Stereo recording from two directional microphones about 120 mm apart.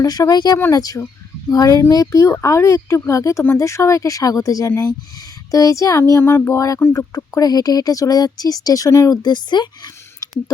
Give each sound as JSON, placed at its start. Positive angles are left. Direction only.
{"t": 0.0, "sound": "speech", "side_deg": 30}